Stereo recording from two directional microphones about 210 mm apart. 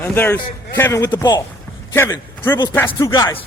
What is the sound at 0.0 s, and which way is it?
A man's voice, 10° left (ahead or behind).